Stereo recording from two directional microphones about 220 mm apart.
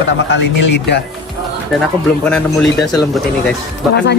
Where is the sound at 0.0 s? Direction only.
55° left (ahead or behind).